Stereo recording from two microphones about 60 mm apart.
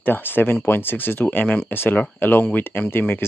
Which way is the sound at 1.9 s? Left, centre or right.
Left.